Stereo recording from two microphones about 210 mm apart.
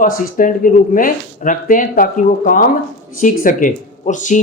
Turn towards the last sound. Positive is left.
turn(degrees=35)  # may be behind; listen again after turning